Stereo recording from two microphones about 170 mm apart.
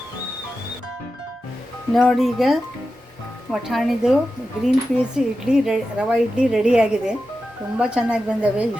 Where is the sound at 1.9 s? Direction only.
Centre (ahead or behind).